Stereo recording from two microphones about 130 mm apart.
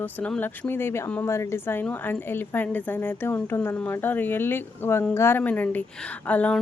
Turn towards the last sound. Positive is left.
turn(degrees=10)  # may be behind; listen again after turning